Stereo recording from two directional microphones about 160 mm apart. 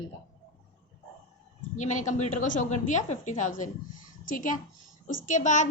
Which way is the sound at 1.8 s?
50° left (ahead or behind).